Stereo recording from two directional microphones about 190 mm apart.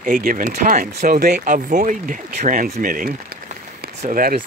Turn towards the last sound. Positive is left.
turn(degrees=-45)  # may be behind; listen again after turning